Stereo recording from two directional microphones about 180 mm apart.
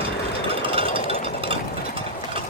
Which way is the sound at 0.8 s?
30° right (ahead or behind).